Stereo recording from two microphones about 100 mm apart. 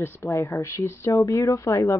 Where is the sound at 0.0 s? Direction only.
25° left (ahead or behind).